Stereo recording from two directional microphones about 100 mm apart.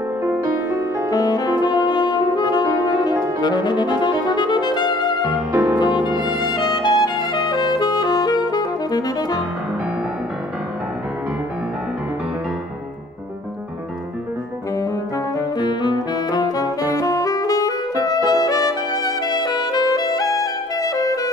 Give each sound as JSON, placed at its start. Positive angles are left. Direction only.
{"t": 0.2, "sound": "music", "side_deg": -20}
{"t": 1.1, "sound": "music", "side_deg": 40}
{"t": 5.5, "sound": "music", "side_deg": -15}
{"t": 5.8, "sound": "music", "side_deg": 50}
{"t": 15.3, "sound": "saxophone", "side_deg": 45}